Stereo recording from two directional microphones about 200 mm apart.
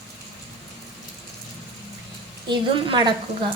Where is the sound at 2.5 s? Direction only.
25° right (ahead or behind).